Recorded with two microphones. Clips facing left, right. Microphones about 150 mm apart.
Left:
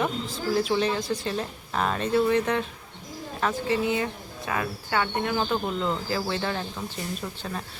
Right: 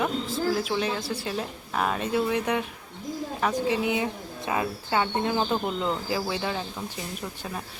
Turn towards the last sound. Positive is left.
turn(degrees=-10)  # may be behind; listen again after turning